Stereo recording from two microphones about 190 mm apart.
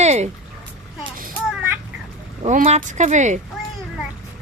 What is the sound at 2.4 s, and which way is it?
Speech, 35° right (ahead or behind).